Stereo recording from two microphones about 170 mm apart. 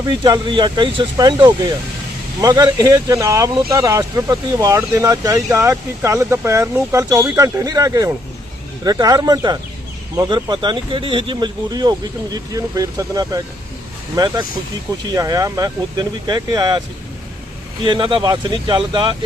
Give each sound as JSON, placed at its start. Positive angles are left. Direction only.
{"t": 0.0, "sound": "speech", "side_deg": -20}
{"t": 17.8, "sound": "speech", "side_deg": -25}